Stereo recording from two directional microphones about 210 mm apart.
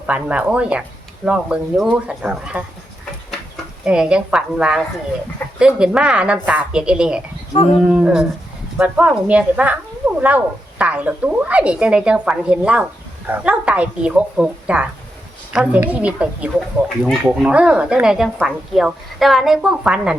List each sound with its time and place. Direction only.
0.1 s speech: 5° right (ahead or behind)
3.8 s speech: 5° right (ahead or behind)
7.5 s speech: 25° left (ahead or behind)
7.8 s speech: 5° right (ahead or behind)